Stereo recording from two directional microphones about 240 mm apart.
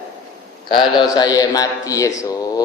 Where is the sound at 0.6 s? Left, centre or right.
Centre.